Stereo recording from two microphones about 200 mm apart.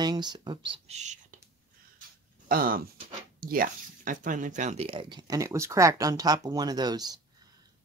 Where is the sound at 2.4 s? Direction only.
45° right (ahead or behind).